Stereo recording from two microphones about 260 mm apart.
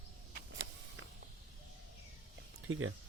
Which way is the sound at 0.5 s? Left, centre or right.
Right.